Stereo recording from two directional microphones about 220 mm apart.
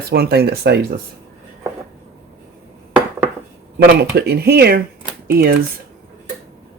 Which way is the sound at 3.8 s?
45° right (ahead or behind).